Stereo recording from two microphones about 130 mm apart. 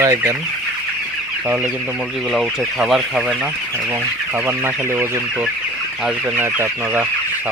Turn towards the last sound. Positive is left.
turn(degrees=-15)  # may be behind; listen again after turning